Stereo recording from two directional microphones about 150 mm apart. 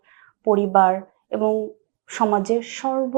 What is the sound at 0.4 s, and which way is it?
Speech, 30° right (ahead or behind).